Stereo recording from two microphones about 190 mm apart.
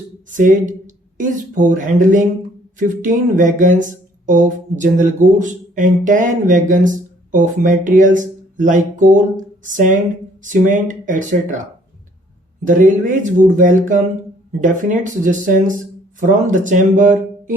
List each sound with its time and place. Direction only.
0.3 s speech: 40° right (ahead or behind)
12.6 s speech: 40° right (ahead or behind)